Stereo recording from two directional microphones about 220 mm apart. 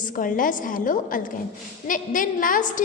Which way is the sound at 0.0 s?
40° left (ahead or behind).